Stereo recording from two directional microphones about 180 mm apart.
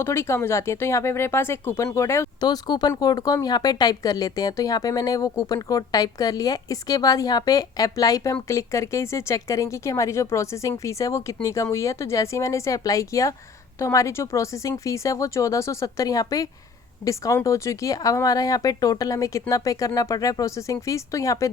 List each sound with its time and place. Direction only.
0.0 s speech: 15° left (ahead or behind)